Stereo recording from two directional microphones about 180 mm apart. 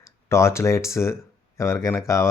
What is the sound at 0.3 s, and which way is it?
Speech, 15° left (ahead or behind).